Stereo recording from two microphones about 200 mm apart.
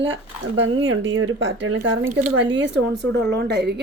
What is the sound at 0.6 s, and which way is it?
Speech, 70° right (ahead or behind).